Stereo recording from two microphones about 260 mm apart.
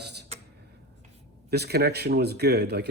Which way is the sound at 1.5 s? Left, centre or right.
Right.